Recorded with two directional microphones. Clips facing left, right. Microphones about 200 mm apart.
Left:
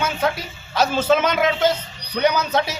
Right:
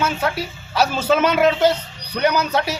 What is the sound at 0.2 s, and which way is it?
A man's voice, 10° right (ahead or behind).